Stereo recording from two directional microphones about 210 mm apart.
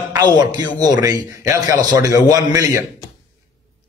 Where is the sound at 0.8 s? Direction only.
15° right (ahead or behind).